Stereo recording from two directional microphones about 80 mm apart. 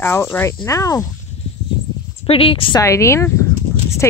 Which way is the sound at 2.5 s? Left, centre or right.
Left.